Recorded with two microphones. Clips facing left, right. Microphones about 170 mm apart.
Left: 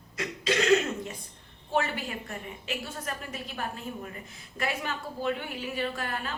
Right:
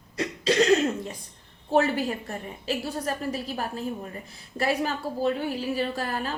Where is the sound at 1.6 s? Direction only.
40° right (ahead or behind).